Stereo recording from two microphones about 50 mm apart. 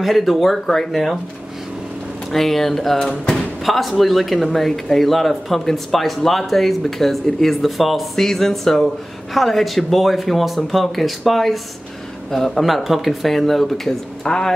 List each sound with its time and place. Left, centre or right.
0.0 s speech: centre
2.3 s speech: centre